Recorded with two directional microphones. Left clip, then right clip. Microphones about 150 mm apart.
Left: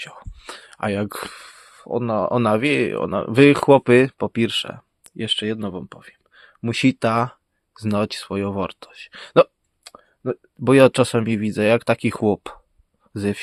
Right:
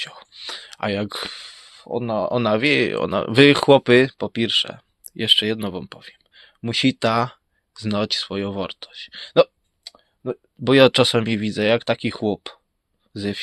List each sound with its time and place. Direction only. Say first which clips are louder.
0.0 s a sound: right 4 dB; 30° left (ahead or behind)
2.6 s speech: right 1 dB; 20° left (ahead or behind)
4.2 s speech: right 1 dB; 40° left (ahead or behind)
5.1 s speech: right 6 dB; 15° left (ahead or behind)
6.0 s whispering: right 2 dB; 40° left (ahead or behind)
7.0 s speech: even; 25° left (ahead or behind); by 10.7 s 50° left (ahead or behind)
10.7 s speech: even; 25° left (ahead or behind); by 13.4 s 45° left (ahead or behind)